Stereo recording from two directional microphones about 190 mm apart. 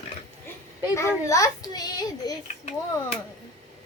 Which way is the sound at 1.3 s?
15° left (ahead or behind).